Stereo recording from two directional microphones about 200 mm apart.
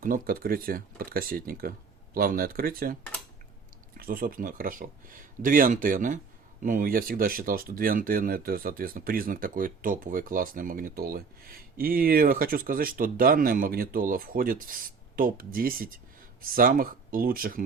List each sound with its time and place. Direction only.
0.0 s speech: 45° right (ahead or behind)